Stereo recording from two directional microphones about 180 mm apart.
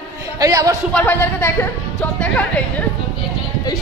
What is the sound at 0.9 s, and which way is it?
Speech, 10° left (ahead or behind).